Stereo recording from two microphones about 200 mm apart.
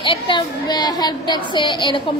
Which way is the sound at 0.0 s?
25° left (ahead or behind).